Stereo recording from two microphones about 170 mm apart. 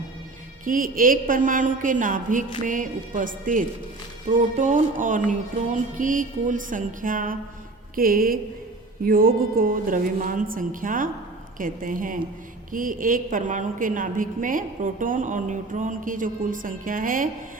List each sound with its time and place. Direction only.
0.6 s a woman's voice: 55° right (ahead or behind)